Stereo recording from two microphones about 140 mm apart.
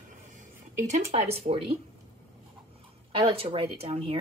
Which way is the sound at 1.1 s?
55° right (ahead or behind).